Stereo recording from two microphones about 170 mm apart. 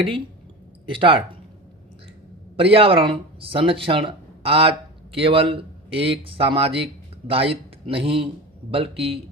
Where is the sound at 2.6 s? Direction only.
35° right (ahead or behind).